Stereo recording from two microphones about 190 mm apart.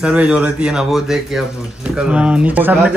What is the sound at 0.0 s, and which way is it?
A man's voice, 5° right (ahead or behind).